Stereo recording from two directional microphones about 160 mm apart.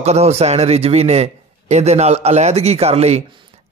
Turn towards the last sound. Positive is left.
turn(degrees=-40)  # may be behind; listen again after turning